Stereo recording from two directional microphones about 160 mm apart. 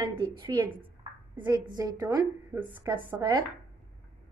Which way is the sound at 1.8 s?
20° right (ahead or behind).